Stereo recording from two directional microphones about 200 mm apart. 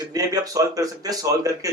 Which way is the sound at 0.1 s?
15° right (ahead or behind).